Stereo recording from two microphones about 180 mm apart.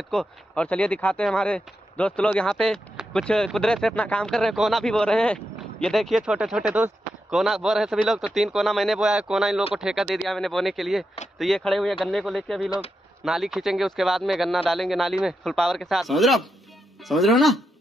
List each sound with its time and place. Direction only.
0.1 s speech: 5° left (ahead or behind)